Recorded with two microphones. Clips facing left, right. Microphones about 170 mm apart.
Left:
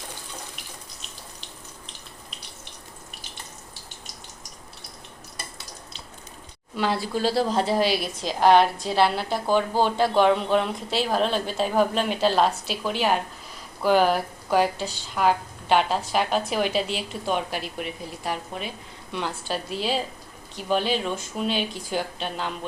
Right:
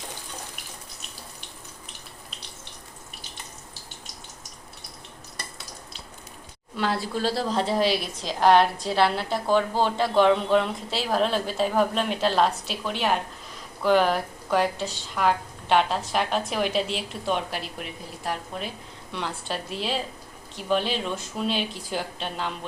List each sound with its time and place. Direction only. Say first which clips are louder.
6.7 s a woman's voice: left 1 dB; centre (ahead or behind)